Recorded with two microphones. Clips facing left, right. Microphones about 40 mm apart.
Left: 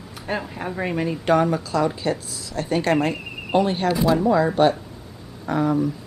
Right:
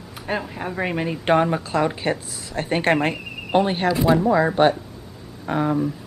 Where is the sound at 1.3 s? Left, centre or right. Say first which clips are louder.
Right 1 dB; right.